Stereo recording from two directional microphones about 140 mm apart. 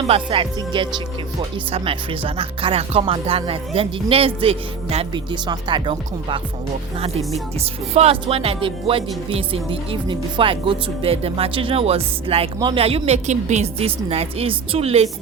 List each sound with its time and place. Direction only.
0.1 s music: 40° right (ahead or behind)
3.0 s speech: 40° right (ahead or behind)
5.1 s music: 30° right (ahead or behind)
12.7 s speech: 45° right (ahead or behind)